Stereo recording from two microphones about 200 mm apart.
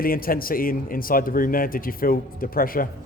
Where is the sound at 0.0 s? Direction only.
45° left (ahead or behind).